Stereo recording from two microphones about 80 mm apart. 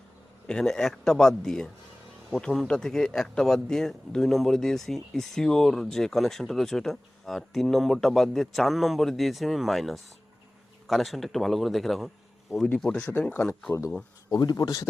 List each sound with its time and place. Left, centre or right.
0.4 s speech: centre
12.8 s speech: centre
14.6 s speech: left